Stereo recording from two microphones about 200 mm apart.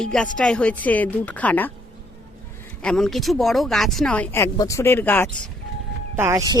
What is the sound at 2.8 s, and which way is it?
A woman's voice, 5° left (ahead or behind).